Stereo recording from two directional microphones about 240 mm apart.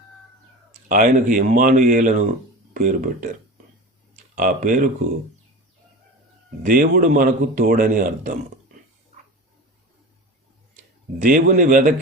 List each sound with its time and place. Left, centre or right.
0.9 s a man's voice: right
6.6 s a man's voice: right
11.2 s a man's voice: right